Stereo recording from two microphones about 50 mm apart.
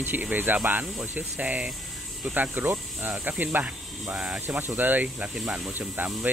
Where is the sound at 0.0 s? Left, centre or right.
Right.